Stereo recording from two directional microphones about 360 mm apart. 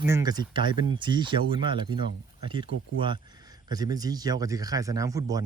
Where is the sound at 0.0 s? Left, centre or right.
Centre.